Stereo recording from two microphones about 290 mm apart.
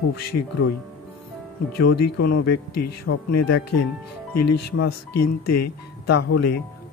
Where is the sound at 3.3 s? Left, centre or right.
Left.